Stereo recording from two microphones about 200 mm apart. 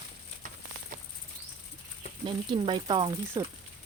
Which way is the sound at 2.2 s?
25° right (ahead or behind).